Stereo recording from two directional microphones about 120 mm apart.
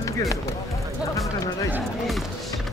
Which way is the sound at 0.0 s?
25° left (ahead or behind).